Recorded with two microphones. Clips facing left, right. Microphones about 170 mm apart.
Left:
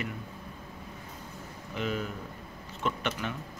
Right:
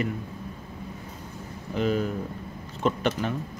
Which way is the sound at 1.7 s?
35° right (ahead or behind).